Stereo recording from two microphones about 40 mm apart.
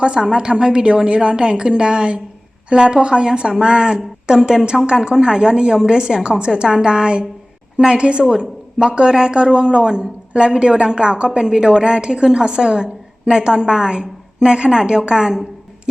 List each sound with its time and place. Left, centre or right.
0.0 s a woman's voice: right